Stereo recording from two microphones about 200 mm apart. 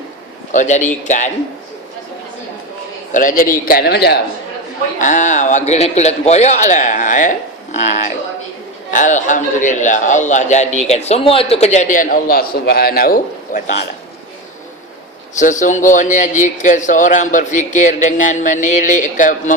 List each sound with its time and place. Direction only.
0.5 s a man's voice: 35° left (ahead or behind)
3.1 s a man's voice: 40° left (ahead or behind)
4.9 s a man's voice: 40° left (ahead or behind)
15.4 s a man's voice: 40° left (ahead or behind)